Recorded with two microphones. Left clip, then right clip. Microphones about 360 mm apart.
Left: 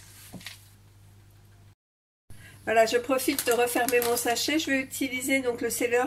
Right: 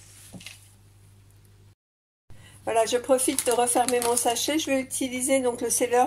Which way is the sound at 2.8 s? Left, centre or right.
Centre.